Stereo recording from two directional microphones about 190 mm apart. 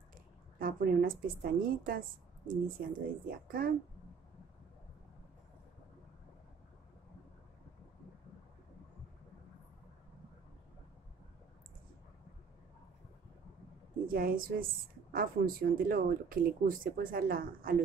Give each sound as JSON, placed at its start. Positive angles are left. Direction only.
{"t": 0.6, "sound": "speech", "side_deg": -50}
{"t": 14.0, "sound": "speech", "side_deg": -50}